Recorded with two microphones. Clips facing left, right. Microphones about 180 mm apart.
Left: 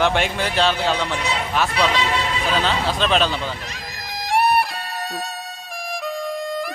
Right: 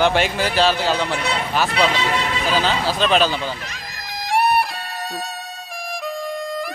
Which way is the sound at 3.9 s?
Centre (ahead or behind).